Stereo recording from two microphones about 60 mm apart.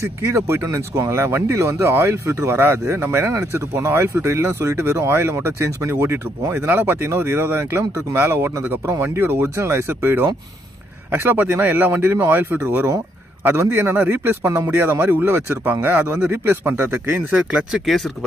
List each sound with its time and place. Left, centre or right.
0.2 s a man's voice: right
17.3 s speech: centre